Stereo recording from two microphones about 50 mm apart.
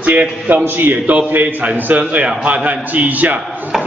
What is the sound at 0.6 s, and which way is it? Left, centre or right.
A man's voice, right.